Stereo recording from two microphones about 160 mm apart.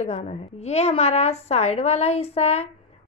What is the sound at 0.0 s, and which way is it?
A woman's voice, 40° left (ahead or behind).